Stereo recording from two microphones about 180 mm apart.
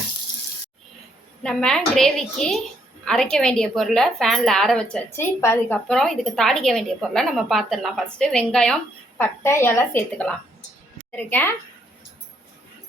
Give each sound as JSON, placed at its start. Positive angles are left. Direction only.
{"t": 1.4, "sound": "a woman's voice", "side_deg": 5}